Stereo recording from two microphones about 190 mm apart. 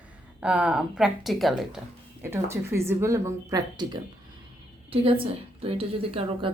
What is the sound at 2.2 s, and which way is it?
A woman's voice, 15° right (ahead or behind).